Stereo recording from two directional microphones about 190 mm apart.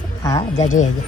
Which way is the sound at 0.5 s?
40° left (ahead or behind).